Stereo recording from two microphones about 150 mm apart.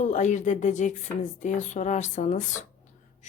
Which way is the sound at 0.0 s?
55° left (ahead or behind).